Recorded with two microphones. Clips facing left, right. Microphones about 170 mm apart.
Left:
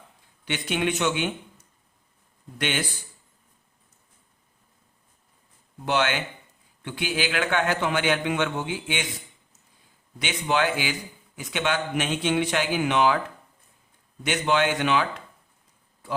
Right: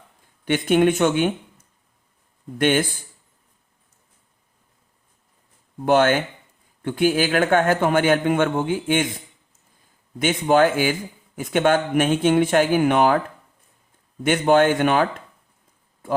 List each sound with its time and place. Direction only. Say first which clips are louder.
0.4 s a man's voice: right 9 dB; 50° right (ahead or behind)
5.8 s a man's voice: right 8 dB; 50° right (ahead or behind)
14.3 s a man's voice: right 7 dB; 50° right (ahead or behind)